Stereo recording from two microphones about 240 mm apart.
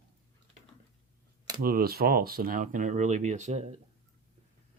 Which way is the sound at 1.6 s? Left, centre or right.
Right.